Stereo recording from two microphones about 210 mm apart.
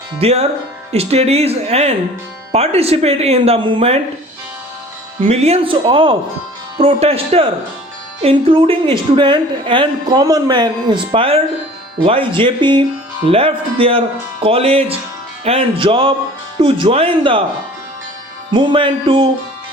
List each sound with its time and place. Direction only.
0.2 s a woman's voice: 30° right (ahead or behind)
5.2 s a woman's voice: 30° right (ahead or behind)
18.5 s a woman's voice: 25° right (ahead or behind)